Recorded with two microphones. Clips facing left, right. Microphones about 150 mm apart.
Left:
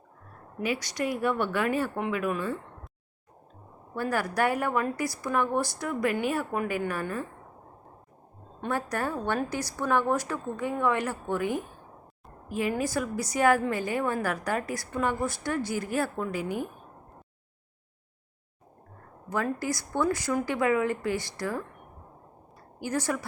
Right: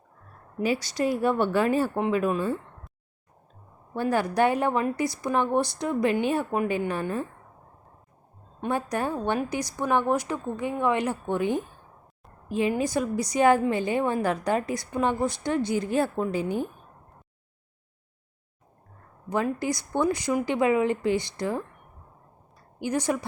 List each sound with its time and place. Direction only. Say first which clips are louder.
0.6 s a woman's voice: right 4 dB; 30° right (ahead or behind)
3.9 s a woman's voice: right 4 dB; 25° right (ahead or behind)
8.6 s a woman's voice: right 3 dB; 20° right (ahead or behind)
19.3 s a woman's voice: right 3 dB; 20° right (ahead or behind)
22.8 s a woman's voice: right 3 dB; 20° right (ahead or behind)